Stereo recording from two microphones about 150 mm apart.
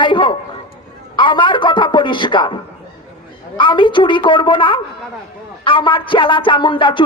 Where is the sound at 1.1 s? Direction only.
30° left (ahead or behind).